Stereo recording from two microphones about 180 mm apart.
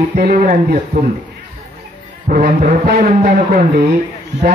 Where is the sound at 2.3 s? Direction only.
50° right (ahead or behind).